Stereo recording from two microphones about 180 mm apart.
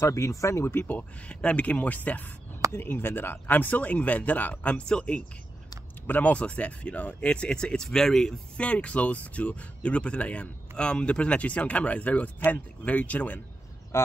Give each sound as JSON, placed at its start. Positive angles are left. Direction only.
{"t": 0.0, "sound": "speech", "side_deg": 15}